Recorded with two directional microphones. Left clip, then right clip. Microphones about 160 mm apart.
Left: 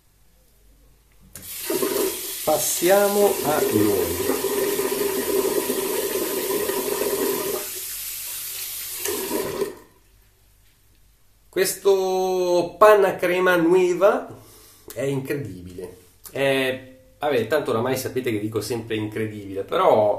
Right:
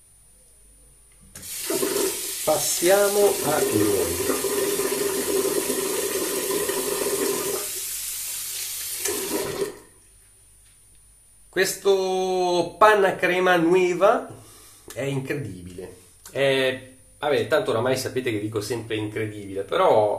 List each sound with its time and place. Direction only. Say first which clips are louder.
1.6 s toilet flush: left 1 dB; centre (ahead or behind)
3.0 s water: left 1 dB; centre (ahead or behind)
11.5 s speech: left 1 dB; centre (ahead or behind)
16.3 s speech: even; 15° left (ahead or behind)